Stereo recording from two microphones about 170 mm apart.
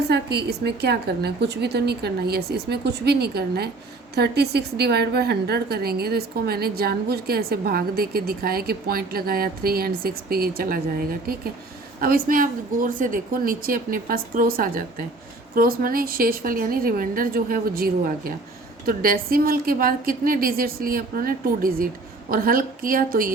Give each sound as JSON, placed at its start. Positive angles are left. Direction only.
{"t": 0.1, "sound": "a woman's voice", "side_deg": -75}